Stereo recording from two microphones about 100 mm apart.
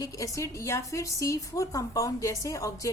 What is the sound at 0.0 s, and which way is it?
A woman's voice, 30° left (ahead or behind).